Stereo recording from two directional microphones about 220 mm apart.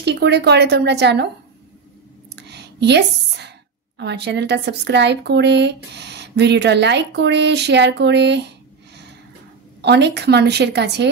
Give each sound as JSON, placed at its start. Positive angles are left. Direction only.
{"t": 0.0, "sound": "a woman's voice", "side_deg": -50}
{"t": 2.3, "sound": "a sound", "side_deg": -50}
{"t": 4.0, "sound": "a woman's voice", "side_deg": -50}